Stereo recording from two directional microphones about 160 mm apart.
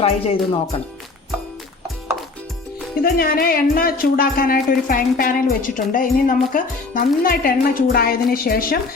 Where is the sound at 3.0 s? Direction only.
70° left (ahead or behind).